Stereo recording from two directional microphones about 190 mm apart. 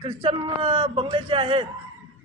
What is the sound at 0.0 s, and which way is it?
A man's voice, 30° right (ahead or behind).